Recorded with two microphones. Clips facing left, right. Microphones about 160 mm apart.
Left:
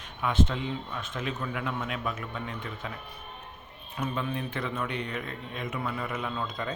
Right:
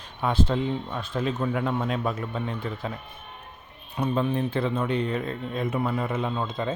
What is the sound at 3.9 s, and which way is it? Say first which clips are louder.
Speech: right 7 dB; 35° right (ahead or behind).